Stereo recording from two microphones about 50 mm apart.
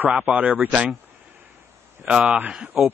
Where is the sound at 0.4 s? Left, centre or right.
Right.